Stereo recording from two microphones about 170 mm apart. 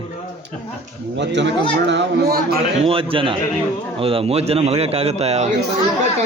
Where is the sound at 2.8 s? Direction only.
35° right (ahead or behind).